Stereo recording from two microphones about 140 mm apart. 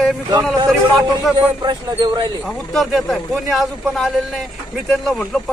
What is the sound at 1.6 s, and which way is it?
Speech, 30° right (ahead or behind).